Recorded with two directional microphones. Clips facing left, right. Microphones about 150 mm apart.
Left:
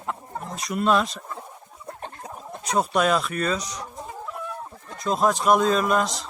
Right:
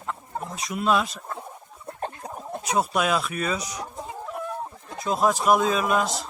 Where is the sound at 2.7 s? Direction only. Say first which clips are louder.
Left 2 dB; 5° right (ahead or behind).